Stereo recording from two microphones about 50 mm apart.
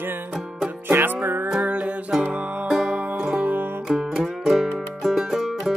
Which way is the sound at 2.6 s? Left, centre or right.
Centre.